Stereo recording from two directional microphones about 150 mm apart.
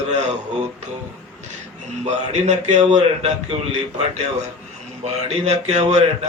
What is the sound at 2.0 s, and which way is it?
A man's voice, 50° right (ahead or behind).